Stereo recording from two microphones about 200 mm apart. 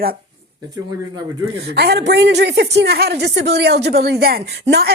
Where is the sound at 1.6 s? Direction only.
55° right (ahead or behind).